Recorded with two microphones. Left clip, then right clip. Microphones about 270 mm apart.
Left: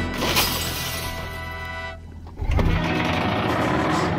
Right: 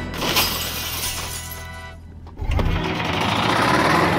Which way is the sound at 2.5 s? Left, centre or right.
Centre.